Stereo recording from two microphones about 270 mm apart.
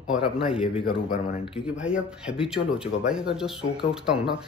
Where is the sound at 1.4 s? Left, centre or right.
Centre.